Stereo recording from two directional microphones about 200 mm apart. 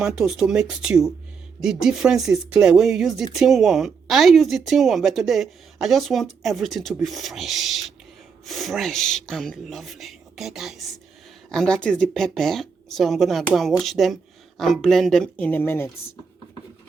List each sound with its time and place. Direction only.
0.0 s speech: 5° right (ahead or behind)